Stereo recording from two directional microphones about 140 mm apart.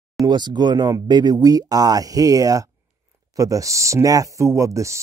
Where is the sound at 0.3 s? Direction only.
30° right (ahead or behind).